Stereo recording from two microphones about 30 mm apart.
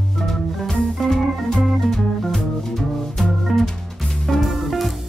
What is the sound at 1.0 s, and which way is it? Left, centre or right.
Organ, centre.